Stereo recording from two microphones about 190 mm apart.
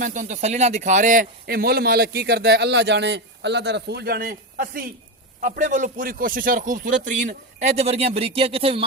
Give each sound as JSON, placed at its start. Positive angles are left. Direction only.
{"t": 0.0, "sound": "a man's voice", "side_deg": -40}